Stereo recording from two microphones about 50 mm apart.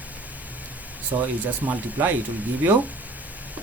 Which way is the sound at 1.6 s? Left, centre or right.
Right.